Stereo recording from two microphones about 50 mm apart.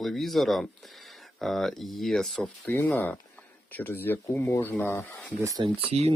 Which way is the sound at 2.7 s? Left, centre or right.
Left.